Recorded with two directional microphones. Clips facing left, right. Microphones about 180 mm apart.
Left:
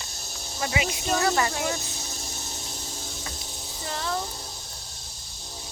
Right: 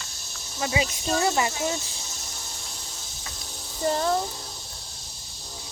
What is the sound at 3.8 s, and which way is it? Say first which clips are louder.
Speech: right 8 dB; 35° right (ahead or behind).